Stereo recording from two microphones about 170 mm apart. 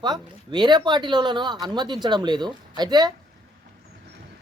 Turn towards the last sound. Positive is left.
turn(degrees=-25)  # may be behind; listen again after turning